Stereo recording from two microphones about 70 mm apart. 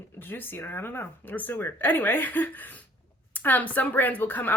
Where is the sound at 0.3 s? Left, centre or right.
Left.